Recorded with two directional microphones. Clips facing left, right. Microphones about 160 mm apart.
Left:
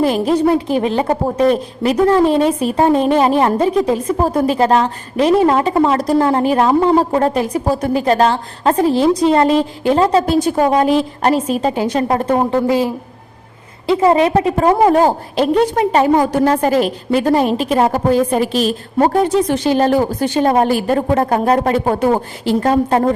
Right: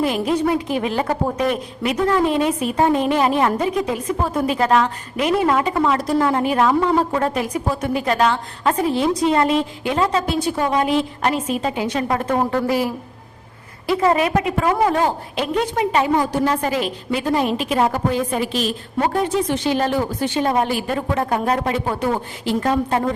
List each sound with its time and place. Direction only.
0.0 s a woman's voice: 35° left (ahead or behind)